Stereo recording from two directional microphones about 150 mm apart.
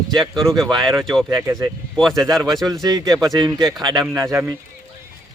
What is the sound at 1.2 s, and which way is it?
Speech, 20° right (ahead or behind).